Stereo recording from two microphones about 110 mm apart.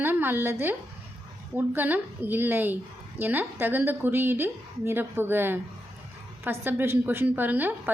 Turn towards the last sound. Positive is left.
turn(degrees=-15)  # may be behind; listen again after turning